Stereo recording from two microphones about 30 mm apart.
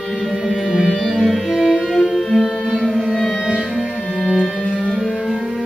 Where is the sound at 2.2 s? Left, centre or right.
Centre.